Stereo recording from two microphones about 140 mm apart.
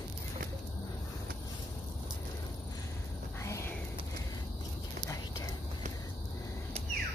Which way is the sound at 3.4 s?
20° left (ahead or behind).